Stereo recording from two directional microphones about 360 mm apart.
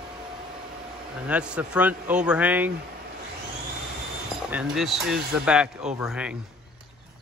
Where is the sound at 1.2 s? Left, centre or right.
Centre.